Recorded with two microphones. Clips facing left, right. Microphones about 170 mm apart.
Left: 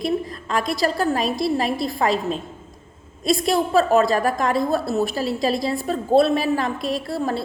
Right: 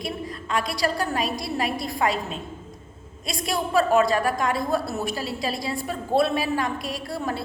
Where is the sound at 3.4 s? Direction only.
40° left (ahead or behind).